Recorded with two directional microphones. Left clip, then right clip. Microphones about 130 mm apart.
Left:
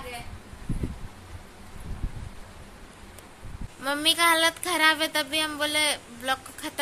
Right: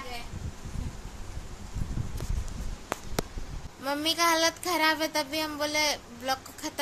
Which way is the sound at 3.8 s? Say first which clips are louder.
Left 4 dB; centre (ahead or behind).